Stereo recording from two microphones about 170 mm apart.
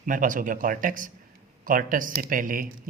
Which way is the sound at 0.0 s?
50° right (ahead or behind).